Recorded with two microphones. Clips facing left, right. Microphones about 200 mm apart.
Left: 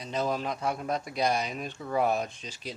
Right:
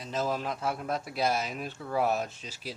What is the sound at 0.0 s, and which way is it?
A man's voice, centre (ahead or behind).